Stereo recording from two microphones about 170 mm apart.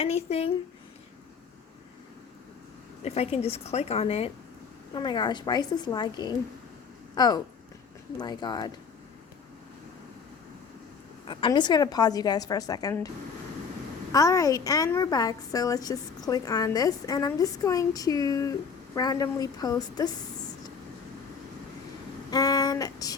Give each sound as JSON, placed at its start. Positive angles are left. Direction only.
{"t": 0.0, "sound": "a woman's voice", "side_deg": 35}
{"t": 3.0, "sound": "a woman's voice", "side_deg": 35}
{"t": 4.9, "sound": "a woman's voice", "side_deg": 25}
{"t": 11.3, "sound": "a woman's voice", "side_deg": 30}
{"t": 14.1, "sound": "a woman's voice", "side_deg": 20}
{"t": 22.3, "sound": "a sound", "side_deg": 20}